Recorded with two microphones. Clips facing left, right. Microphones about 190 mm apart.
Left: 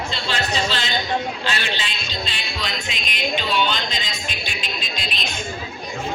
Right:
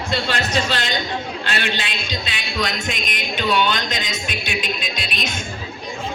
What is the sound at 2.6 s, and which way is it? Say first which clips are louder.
Music: right 7 dB; 50° right (ahead or behind).